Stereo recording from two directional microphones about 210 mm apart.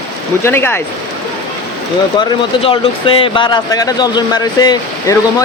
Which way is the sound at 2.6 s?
25° left (ahead or behind).